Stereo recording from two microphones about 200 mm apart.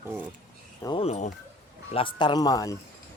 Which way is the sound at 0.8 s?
25° left (ahead or behind).